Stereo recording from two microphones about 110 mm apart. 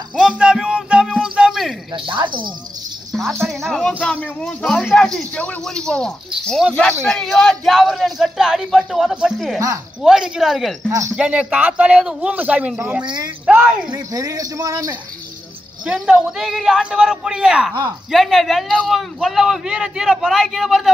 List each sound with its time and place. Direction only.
0.4 s music: 5° right (ahead or behind)
1.2 s a sound: 5° right (ahead or behind)
2.0 s speech: 45° right (ahead or behind)
3.1 s a man's voice: centre (ahead or behind)
13.0 s speech: 40° right (ahead or behind)
13.5 s speech: 10° right (ahead or behind)
13.8 s speech: 35° right (ahead or behind)
15.8 s a man's voice: 10° right (ahead or behind)